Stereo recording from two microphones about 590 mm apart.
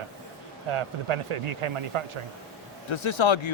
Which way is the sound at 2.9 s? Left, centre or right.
Left.